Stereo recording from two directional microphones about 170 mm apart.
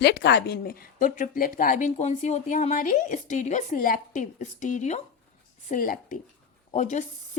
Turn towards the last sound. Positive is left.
turn(degrees=45)  # may be behind; listen again after turning